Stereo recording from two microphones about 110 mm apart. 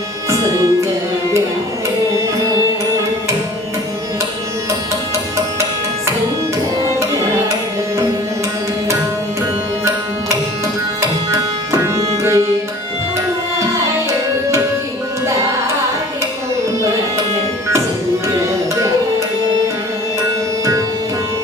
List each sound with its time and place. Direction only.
11.3 s tabla: 25° right (ahead or behind)